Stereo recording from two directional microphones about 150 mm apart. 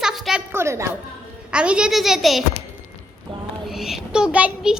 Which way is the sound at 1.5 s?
5° right (ahead or behind).